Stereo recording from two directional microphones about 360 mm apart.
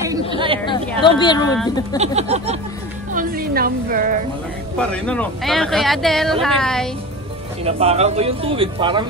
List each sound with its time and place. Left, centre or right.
0.1 s chatter: centre
1.0 s speech: centre
2.0 s speech: centre
3.1 s music: right
4.7 s speech: centre
7.6 s speech: centre